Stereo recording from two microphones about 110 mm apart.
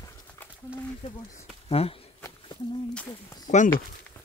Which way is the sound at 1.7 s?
60° left (ahead or behind).